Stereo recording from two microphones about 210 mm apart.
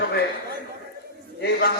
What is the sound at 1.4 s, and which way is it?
Speech, 50° left (ahead or behind).